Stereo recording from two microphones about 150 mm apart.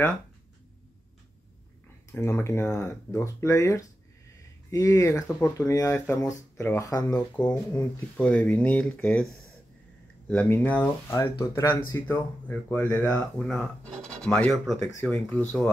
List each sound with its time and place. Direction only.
2.1 s speech: 20° left (ahead or behind)
7.1 s speech: 5° left (ahead or behind)